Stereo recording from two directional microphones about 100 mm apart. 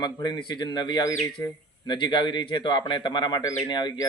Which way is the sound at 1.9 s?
50° left (ahead or behind).